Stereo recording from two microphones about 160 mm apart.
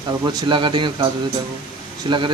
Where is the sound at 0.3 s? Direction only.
25° right (ahead or behind).